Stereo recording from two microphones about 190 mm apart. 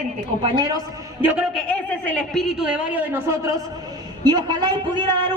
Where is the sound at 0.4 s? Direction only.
20° right (ahead or behind).